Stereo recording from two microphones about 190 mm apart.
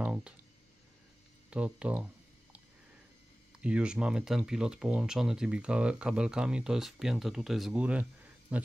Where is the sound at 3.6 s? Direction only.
5° right (ahead or behind).